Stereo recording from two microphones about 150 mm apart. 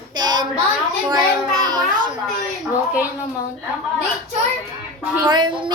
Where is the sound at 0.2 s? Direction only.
30° right (ahead or behind).